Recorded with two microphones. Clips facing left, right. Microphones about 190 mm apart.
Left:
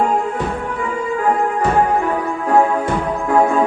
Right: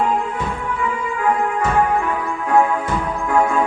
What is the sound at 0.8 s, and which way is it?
Music, 35° left (ahead or behind).